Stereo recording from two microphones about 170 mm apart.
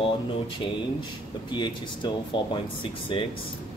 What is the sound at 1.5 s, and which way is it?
Speech, 25° left (ahead or behind).